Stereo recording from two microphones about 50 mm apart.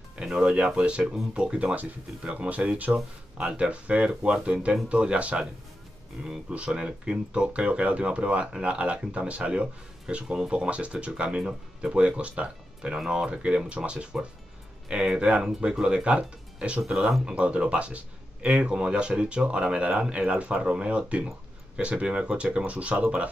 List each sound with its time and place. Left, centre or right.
0.3 s speech: centre
6.5 s speech: right
16.8 s speech: centre
17.2 s speech: right